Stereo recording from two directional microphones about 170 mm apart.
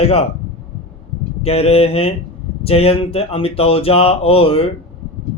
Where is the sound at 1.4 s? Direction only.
35° left (ahead or behind).